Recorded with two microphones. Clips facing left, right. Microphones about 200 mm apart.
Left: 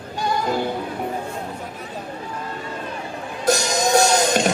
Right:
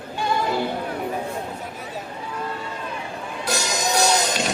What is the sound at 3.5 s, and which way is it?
Music, 50° left (ahead or behind).